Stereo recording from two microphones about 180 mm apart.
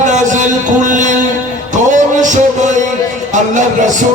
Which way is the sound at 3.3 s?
45° right (ahead or behind).